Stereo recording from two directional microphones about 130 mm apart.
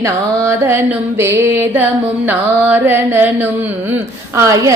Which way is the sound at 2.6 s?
15° right (ahead or behind).